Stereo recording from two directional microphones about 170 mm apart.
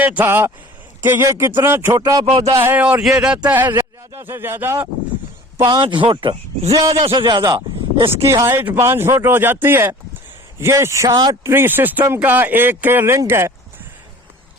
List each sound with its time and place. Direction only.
0.0 s a man's voice: 10° right (ahead or behind)
2.6 s speech: 10° right (ahead or behind)
5.6 s a man's voice: 30° right (ahead or behind)
8.3 s speech: 15° right (ahead or behind)